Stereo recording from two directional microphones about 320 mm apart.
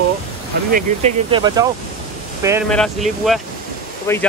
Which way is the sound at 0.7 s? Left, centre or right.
Centre.